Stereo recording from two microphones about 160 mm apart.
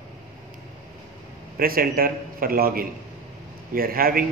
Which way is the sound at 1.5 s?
65° right (ahead or behind).